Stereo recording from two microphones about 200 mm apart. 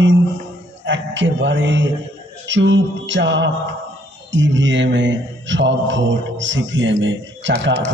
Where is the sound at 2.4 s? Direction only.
65° right (ahead or behind).